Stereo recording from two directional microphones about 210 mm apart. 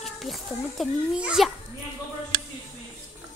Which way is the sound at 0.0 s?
Centre (ahead or behind).